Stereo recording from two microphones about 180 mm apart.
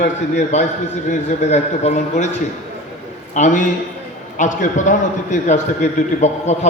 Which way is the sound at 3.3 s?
45° left (ahead or behind).